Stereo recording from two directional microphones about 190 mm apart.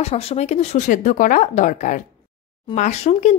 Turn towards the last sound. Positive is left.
turn(degrees=35)  # may be behind; listen again after turning